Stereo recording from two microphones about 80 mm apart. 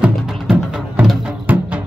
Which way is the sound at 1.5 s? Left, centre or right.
Right.